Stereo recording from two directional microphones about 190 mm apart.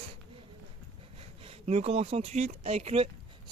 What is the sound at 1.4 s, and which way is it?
Speech, 35° right (ahead or behind).